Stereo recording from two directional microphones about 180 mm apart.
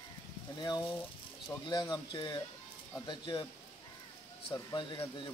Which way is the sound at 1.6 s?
25° left (ahead or behind).